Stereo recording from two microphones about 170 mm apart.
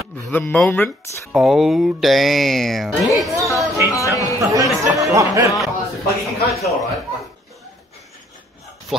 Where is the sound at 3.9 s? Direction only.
20° left (ahead or behind).